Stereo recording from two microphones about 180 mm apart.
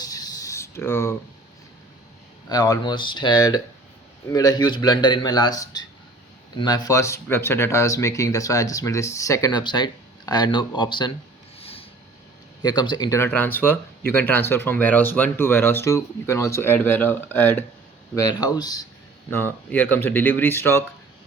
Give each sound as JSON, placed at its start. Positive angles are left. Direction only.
{"t": 0.0, "sound": "writing", "side_deg": 20}
{"t": 2.5, "sound": "speech", "side_deg": 20}
{"t": 11.6, "sound": "a sound", "side_deg": 30}
{"t": 12.6, "sound": "speech", "side_deg": 25}
{"t": 19.3, "sound": "speech", "side_deg": 10}